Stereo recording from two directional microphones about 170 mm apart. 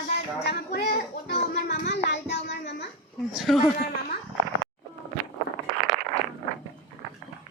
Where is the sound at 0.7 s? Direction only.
75° left (ahead or behind).